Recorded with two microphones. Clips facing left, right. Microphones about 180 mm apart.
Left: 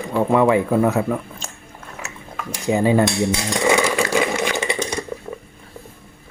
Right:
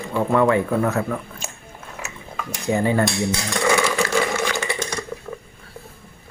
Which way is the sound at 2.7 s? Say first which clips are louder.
Left 3 dB; 15° left (ahead or behind).